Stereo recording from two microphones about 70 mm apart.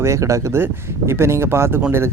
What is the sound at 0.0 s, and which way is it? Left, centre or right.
Speech, right.